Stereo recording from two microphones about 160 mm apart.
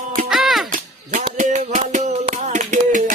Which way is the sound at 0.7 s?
50° right (ahead or behind).